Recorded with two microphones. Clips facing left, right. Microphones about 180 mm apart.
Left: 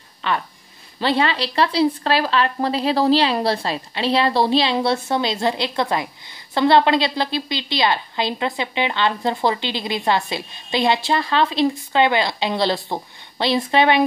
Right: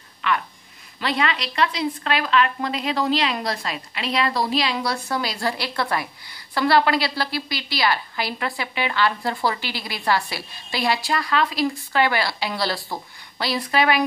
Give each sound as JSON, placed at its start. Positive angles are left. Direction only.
{"t": 0.2, "sound": "a woman's voice", "side_deg": 30}